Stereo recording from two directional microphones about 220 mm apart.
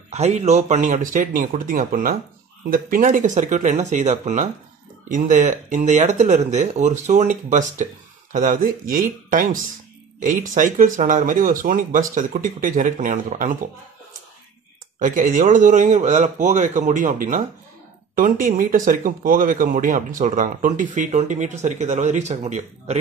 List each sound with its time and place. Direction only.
0.1 s speech: 30° right (ahead or behind)
15.0 s speech: 35° right (ahead or behind)